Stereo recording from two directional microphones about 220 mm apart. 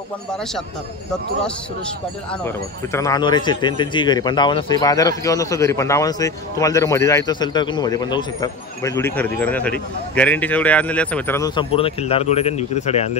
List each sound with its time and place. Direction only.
2.4 s a man's voice: 15° left (ahead or behind); by 13.2 s 30° left (ahead or behind)